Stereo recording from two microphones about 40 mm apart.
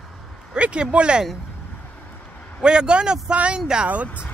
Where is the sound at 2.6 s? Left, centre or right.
Right.